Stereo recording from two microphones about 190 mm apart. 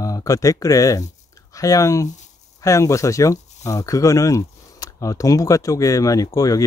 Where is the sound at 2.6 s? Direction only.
15° left (ahead or behind).